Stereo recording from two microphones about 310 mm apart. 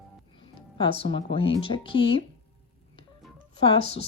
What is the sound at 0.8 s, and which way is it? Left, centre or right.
Speech, centre.